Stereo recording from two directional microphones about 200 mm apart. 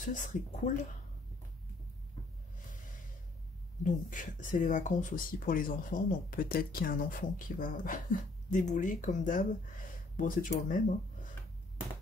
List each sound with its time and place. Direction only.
0.0 s speech: 40° left (ahead or behind)
3.8 s speech: 40° left (ahead or behind)